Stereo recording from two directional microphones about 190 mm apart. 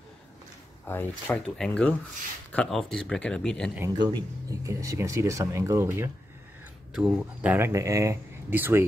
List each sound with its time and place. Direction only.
0.8 s speech: 10° left (ahead or behind)
4.0 s speech: 20° right (ahead or behind)